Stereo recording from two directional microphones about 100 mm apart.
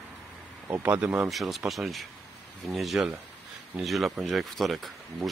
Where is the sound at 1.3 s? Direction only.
Centre (ahead or behind).